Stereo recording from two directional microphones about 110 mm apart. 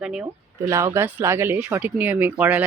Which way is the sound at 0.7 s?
30° right (ahead or behind).